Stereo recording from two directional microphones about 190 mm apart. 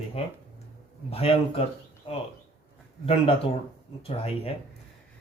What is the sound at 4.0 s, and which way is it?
Speech, 30° left (ahead or behind).